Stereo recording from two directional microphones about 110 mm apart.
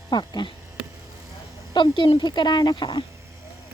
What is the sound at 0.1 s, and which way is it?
Speech, 45° left (ahead or behind).